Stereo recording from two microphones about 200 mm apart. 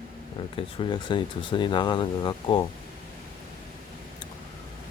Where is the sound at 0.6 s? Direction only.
25° left (ahead or behind).